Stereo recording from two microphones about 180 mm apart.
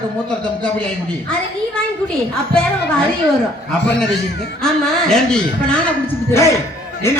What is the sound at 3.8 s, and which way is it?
Speech, 70° left (ahead or behind).